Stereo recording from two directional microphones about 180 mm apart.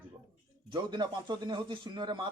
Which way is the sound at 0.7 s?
25° right (ahead or behind).